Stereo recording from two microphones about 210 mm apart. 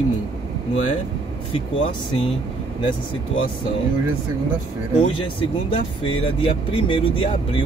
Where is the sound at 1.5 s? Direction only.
25° left (ahead or behind).